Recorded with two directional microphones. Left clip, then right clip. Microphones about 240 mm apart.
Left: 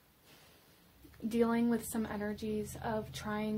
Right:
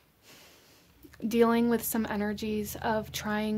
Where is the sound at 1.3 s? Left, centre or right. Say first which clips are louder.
Right 7 dB; right.